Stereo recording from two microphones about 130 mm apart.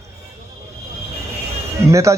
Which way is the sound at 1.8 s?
25° right (ahead or behind).